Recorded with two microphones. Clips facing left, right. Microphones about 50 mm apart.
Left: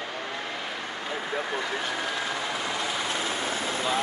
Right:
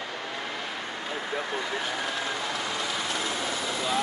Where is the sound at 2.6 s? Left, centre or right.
Left.